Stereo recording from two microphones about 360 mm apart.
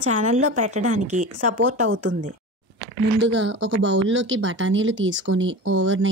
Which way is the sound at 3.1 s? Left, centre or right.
Right.